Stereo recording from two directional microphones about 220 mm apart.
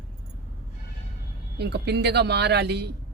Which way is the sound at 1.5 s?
50° right (ahead or behind).